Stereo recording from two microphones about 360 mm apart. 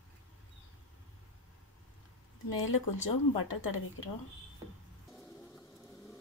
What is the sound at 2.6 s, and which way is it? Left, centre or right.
Speech, left.